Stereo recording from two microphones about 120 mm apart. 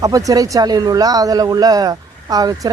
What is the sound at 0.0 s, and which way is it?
A woman's voice, 30° right (ahead or behind).